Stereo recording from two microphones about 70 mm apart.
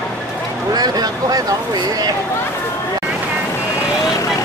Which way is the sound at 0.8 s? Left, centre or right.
Right.